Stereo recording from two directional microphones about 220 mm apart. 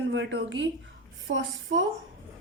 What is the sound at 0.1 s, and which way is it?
A woman's voice, 55° right (ahead or behind).